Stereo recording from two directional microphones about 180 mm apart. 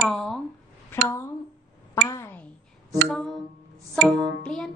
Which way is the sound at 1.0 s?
15° left (ahead or behind).